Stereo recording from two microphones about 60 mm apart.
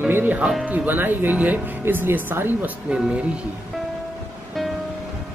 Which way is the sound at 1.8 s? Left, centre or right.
Right.